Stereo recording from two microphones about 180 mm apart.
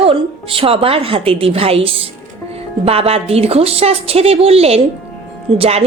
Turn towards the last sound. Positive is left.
turn(degrees=-35)  # may be behind; listen again after turning